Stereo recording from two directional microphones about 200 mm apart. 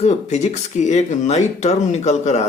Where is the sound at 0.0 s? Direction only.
35° left (ahead or behind).